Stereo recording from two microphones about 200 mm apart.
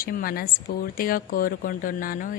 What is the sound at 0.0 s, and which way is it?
A woman's voice, 45° left (ahead or behind).